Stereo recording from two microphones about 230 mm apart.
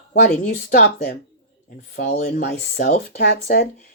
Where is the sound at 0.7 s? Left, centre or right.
Left.